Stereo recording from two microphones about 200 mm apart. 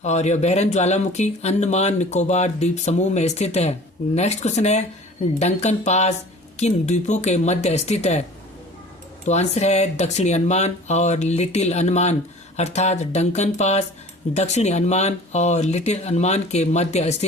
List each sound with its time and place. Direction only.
0.0 s speech: 35° left (ahead or behind)
9.2 s speech: 35° left (ahead or behind)